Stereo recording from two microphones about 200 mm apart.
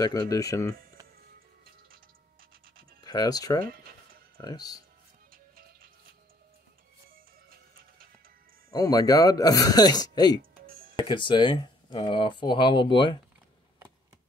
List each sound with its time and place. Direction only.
0.0 s speech: 20° left (ahead or behind)
3.0 s speech: 20° left (ahead or behind)
3.6 s music: 50° right (ahead or behind)
4.4 s speech: 20° left (ahead or behind)
8.6 s speech: 15° left (ahead or behind)